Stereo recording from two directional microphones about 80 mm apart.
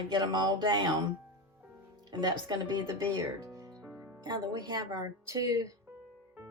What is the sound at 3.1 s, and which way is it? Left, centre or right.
Music, right.